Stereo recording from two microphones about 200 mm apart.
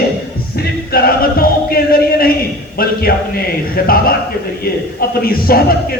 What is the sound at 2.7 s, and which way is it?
A man's voice, 45° left (ahead or behind).